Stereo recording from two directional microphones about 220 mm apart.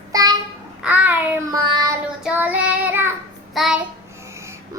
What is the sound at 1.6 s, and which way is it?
Child singing, 20° right (ahead or behind).